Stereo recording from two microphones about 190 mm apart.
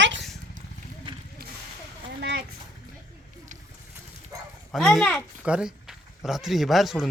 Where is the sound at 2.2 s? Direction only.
60° right (ahead or behind).